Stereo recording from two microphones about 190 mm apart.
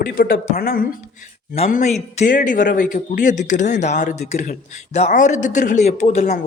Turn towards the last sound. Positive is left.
turn(degrees=35)  # may be behind; listen again after turning